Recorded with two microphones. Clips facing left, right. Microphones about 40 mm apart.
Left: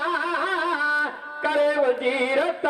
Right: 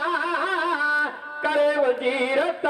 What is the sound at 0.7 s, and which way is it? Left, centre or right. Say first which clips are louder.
Music: even; centre.